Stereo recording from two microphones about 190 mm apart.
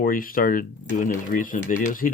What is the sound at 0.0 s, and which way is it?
Speech, 50° left (ahead or behind).